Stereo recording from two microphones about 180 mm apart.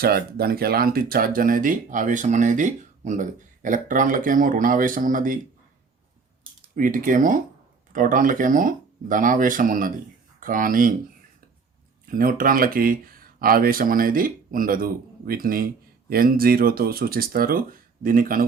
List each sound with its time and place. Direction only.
0.0 s speech: 55° right (ahead or behind)
6.7 s speech: 50° right (ahead or behind)
12.0 s speech: 50° right (ahead or behind)